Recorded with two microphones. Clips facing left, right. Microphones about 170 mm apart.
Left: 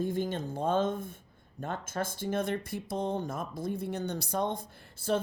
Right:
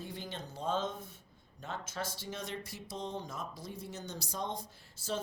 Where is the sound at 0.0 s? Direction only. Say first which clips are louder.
Left 12 dB; 50° left (ahead or behind).